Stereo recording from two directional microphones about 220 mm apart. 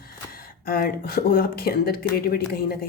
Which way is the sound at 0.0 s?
40° left (ahead or behind).